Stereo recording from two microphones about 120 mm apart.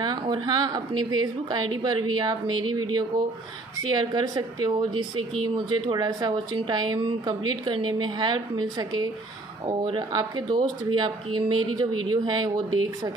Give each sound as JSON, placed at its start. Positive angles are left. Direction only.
{"t": 0.0, "sound": "a woman's voice", "side_deg": -35}